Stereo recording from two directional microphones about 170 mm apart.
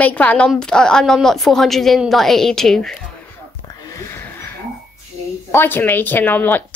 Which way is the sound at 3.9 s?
15° left (ahead or behind).